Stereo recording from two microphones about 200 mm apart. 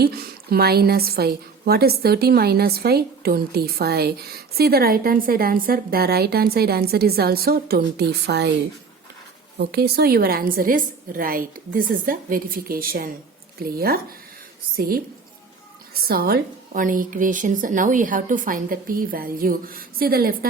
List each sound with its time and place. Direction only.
0.0 s a woman's voice: 50° right (ahead or behind)
9.6 s a woman's voice: 55° right (ahead or behind)